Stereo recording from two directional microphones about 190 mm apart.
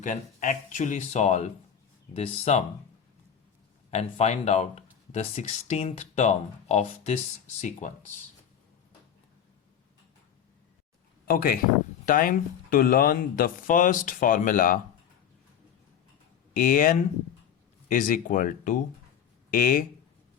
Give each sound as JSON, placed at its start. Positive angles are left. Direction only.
{"t": 0.0, "sound": "speech", "side_deg": 40}
{"t": 3.9, "sound": "speech", "side_deg": 35}
{"t": 11.3, "sound": "speech", "side_deg": 50}
{"t": 16.6, "sound": "speech", "side_deg": 45}